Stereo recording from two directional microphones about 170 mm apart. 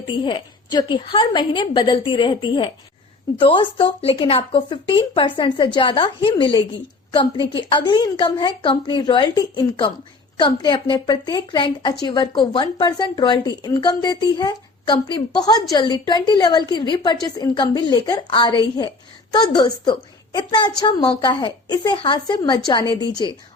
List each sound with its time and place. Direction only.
0.2 s speech: 25° left (ahead or behind)